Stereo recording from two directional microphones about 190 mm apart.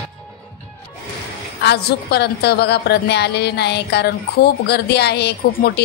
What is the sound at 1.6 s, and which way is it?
A woman's voice, 60° left (ahead or behind).